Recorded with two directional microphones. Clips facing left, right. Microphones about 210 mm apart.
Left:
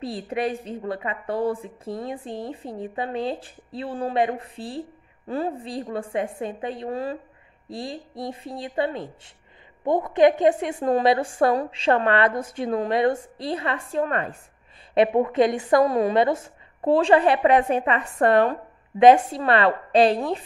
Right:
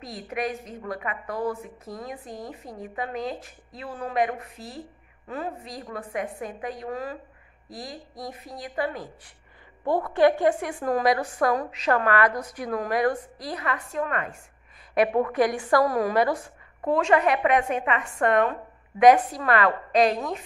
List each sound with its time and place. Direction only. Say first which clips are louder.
0.0 s a woman's voice: left 4 dB; 30° left (ahead or behind)
15.0 s a woman's voice: left 3 dB; 20° left (ahead or behind)